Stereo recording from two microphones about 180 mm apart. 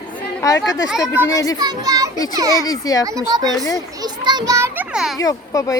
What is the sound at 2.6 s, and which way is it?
Speech, 20° left (ahead or behind).